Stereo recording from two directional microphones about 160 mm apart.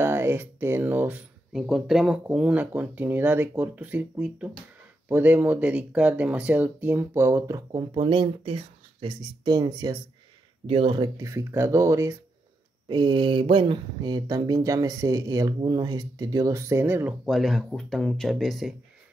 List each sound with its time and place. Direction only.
0.0 s speech: 15° right (ahead or behind)
7.9 s speech: 30° right (ahead or behind)
10.7 s speech: 35° right (ahead or behind); by 17.1 s 15° right (ahead or behind)
17.2 s speech: centre (ahead or behind)